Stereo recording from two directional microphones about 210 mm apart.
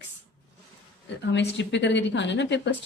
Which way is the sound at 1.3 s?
55° left (ahead or behind).